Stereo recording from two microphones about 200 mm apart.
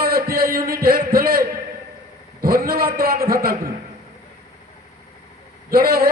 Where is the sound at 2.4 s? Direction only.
50° right (ahead or behind).